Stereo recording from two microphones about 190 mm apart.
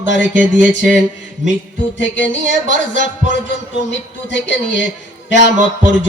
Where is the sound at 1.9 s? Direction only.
70° left (ahead or behind).